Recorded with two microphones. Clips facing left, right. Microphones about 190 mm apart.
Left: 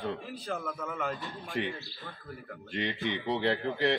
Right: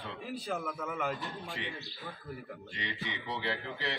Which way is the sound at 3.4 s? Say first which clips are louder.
Left 9 dB; 50° left (ahead or behind).